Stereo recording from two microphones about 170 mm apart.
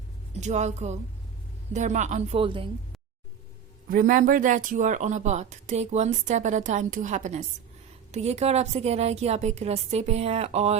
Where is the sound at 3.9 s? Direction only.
55° right (ahead or behind).